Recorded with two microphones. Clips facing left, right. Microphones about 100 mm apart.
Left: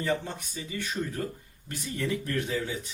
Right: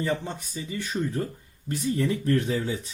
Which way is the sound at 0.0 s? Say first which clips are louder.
Right 1 dB; 25° right (ahead or behind).